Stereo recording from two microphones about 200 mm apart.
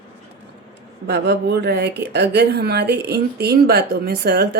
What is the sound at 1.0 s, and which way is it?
Speech, 55° right (ahead or behind).